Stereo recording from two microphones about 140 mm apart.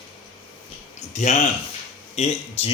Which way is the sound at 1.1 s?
55° left (ahead or behind).